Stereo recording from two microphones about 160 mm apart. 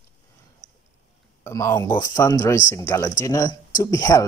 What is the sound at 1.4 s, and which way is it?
Speech, 15° left (ahead or behind).